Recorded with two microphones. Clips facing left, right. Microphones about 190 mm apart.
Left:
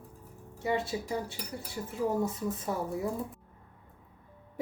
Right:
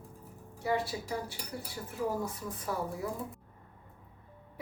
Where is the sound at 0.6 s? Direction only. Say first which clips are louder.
Left 1 dB; 20° left (ahead or behind).